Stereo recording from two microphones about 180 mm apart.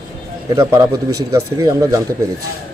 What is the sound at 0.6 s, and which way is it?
Speech, 15° right (ahead or behind).